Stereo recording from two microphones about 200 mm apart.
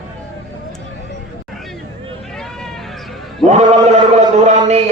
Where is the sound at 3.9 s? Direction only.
35° right (ahead or behind).